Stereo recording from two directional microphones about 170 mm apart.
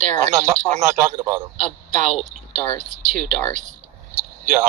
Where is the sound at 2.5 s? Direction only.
50° right (ahead or behind).